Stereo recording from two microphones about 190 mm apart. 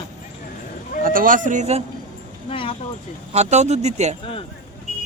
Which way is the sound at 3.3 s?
35° right (ahead or behind).